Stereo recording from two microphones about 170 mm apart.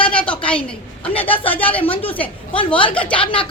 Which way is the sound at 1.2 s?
10° left (ahead or behind).